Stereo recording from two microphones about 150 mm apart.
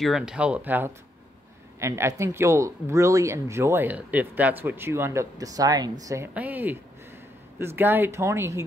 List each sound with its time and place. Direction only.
0.0 s speech: 5° right (ahead or behind); by 8.6 s 20° right (ahead or behind)